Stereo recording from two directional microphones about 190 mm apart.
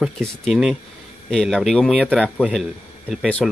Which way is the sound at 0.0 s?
Centre (ahead or behind).